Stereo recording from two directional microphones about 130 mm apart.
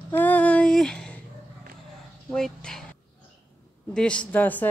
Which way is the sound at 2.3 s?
5° left (ahead or behind).